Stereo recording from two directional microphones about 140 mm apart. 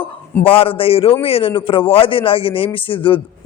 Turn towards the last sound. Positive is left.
turn(degrees=40)  # may be behind; listen again after turning